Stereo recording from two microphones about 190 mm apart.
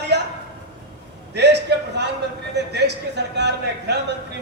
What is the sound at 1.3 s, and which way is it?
A man's voice, 65° right (ahead or behind).